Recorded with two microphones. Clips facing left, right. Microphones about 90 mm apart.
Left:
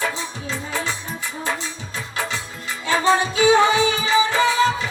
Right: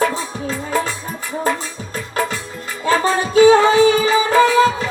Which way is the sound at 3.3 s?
45° right (ahead or behind).